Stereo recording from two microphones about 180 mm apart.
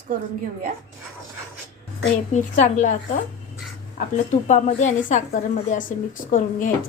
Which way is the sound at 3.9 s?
45° left (ahead or behind).